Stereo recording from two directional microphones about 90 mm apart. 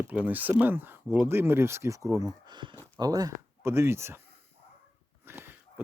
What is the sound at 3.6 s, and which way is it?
Speech, 30° right (ahead or behind).